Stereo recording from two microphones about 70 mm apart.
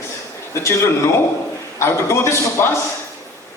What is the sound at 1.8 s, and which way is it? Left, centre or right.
Speech, left.